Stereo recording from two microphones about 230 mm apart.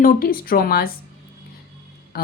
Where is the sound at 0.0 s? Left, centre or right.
Left.